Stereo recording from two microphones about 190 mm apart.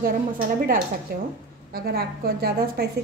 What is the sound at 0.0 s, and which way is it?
A woman's voice, 50° right (ahead or behind).